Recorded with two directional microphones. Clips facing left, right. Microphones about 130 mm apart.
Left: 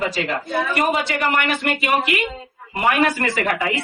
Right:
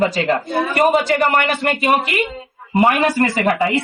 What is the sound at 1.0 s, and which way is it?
Speech, 40° right (ahead or behind).